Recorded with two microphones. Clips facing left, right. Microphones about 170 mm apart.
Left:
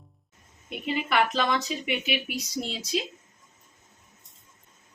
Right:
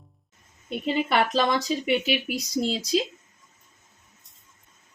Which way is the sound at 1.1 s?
35° right (ahead or behind).